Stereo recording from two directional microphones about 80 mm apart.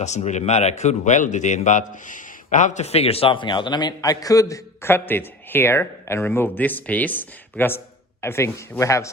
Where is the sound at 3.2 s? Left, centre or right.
Left.